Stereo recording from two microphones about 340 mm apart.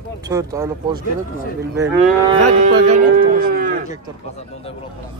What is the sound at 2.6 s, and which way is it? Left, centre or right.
Speech, centre.